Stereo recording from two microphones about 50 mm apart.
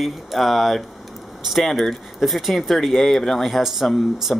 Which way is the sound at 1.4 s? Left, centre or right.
Centre.